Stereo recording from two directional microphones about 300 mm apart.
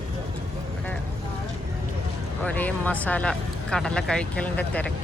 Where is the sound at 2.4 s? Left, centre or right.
Centre.